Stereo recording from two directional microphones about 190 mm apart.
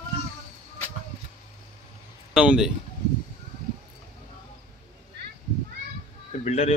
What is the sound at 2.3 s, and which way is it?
Speech, 5° right (ahead or behind).